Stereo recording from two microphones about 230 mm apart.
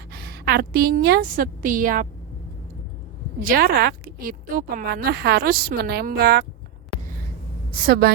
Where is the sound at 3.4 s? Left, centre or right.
Right.